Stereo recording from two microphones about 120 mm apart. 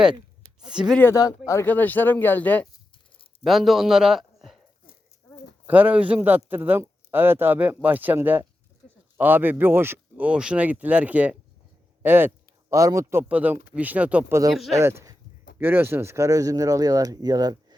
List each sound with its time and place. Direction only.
1.0 s speech: 15° left (ahead or behind)
3.4 s a man's voice: centre (ahead or behind)
5.6 s speech: 15° right (ahead or behind)
14.5 s speech: centre (ahead or behind)
14.8 s speech: 25° right (ahead or behind)